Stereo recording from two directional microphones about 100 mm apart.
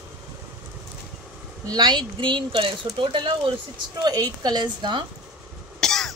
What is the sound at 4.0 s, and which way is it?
A woman's voice, 40° right (ahead or behind).